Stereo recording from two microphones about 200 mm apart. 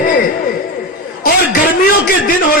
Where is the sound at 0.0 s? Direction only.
45° left (ahead or behind).